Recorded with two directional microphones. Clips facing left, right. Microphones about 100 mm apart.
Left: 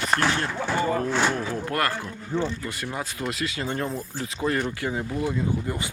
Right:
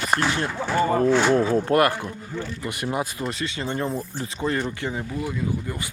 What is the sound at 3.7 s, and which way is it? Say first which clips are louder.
Speech: right 2 dB; 10° right (ahead or behind).